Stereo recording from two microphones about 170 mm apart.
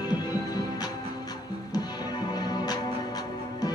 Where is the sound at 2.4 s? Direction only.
25° left (ahead or behind).